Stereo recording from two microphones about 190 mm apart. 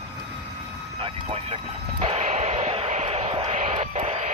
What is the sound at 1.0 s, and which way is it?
Artillery fire, 35° right (ahead or behind).